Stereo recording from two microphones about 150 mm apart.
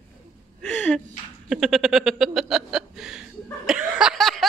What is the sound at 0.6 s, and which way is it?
Gasp, 5° left (ahead or behind).